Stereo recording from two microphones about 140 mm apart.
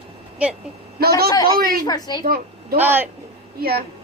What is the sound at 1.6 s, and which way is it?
Speech, 90° right.